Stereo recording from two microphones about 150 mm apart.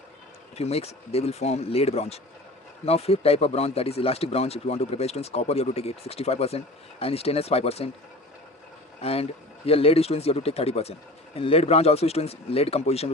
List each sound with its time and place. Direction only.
0.5 s speech: 45° left (ahead or behind)
9.0 s speech: 40° left (ahead or behind)